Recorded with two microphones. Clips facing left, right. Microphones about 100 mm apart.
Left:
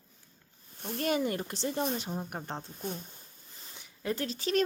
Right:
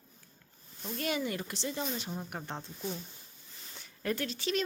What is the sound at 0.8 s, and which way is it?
A woman's voice, 50° left (ahead or behind).